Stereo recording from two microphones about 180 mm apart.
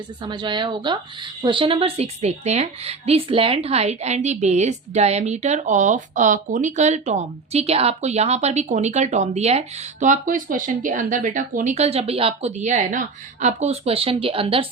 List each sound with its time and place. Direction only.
0.3 s a woman's voice: 25° right (ahead or behind)